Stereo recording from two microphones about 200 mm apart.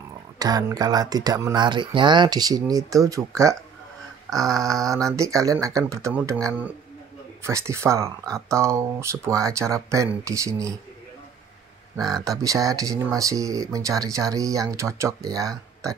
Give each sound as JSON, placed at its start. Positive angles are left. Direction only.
{"t": 0.4, "sound": "speech", "side_deg": -20}
{"t": 7.4, "sound": "speech", "side_deg": -15}
{"t": 12.1, "sound": "speech", "side_deg": -15}